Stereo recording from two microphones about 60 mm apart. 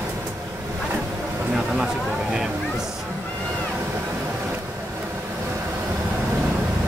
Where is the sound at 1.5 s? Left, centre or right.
Centre.